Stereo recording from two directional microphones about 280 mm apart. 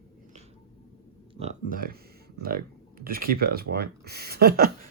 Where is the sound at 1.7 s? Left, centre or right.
Right.